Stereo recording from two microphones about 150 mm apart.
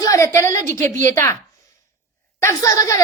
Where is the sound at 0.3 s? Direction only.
20° left (ahead or behind).